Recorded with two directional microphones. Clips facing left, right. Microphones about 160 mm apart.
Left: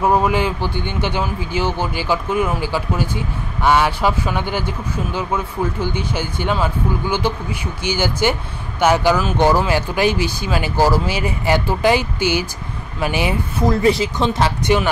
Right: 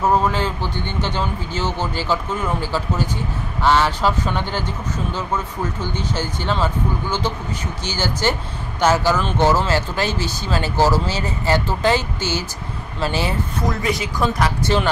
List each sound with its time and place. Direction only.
0.0 s speech: 10° left (ahead or behind)
13.7 s speech: 30° left (ahead or behind)